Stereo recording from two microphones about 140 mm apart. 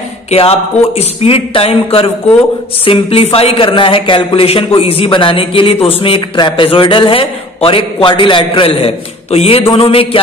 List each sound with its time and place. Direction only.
0.3 s a man's voice: 45° left (ahead or behind)